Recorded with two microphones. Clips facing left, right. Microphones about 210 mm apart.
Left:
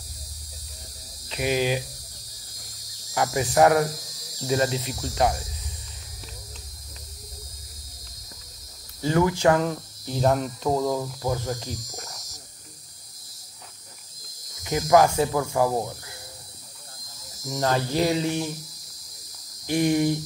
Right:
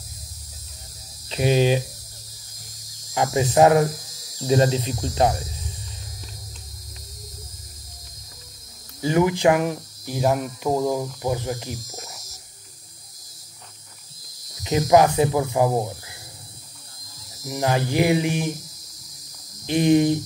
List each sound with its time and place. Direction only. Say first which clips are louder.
1.3 s speech: right 5 dB; 30° right (ahead or behind)
3.2 s speech: right 3 dB; 20° right (ahead or behind)
9.0 s a sound: right 2 dB; 20° right (ahead or behind)
14.6 s speech: right 2 dB; 20° right (ahead or behind)
17.5 s a sound: right 2 dB; 15° right (ahead or behind)
19.6 s speech: right 4 dB; 20° right (ahead or behind)